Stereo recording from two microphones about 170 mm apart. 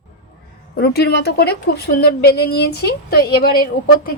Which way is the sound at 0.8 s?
70° left (ahead or behind).